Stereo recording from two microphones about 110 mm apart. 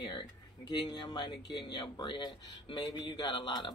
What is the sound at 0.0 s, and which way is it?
Speech, 45° left (ahead or behind).